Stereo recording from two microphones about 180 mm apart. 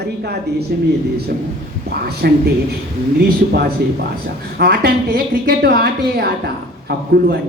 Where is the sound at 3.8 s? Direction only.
65° right (ahead or behind).